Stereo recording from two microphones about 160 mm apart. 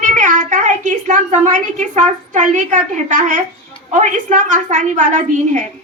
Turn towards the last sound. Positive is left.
turn(degrees=-50)  # may be behind; listen again after turning